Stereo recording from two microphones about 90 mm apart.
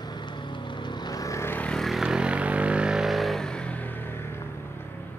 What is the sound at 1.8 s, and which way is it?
Vehicle, centre (ahead or behind).